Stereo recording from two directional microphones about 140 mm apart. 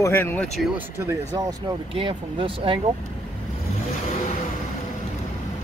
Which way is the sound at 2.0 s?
40° right (ahead or behind).